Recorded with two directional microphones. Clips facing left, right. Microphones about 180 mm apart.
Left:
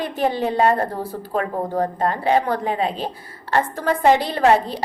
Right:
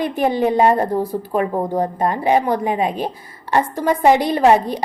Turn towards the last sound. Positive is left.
turn(degrees=-15)  # may be behind; listen again after turning